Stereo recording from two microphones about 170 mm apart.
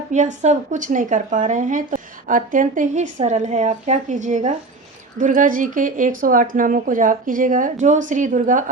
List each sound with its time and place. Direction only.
0.1 s a woman's voice: 45° right (ahead or behind)